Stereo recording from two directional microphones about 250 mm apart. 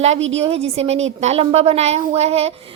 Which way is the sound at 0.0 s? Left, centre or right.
Right.